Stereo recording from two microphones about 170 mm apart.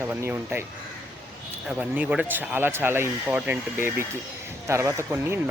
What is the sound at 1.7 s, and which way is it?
Speech, 5° right (ahead or behind).